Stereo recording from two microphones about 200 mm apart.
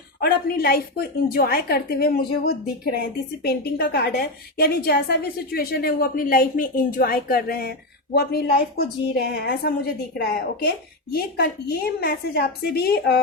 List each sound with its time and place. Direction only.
0.2 s a woman's voice: 50° left (ahead or behind)